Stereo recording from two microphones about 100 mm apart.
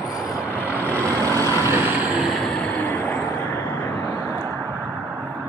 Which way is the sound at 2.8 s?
15° left (ahead or behind).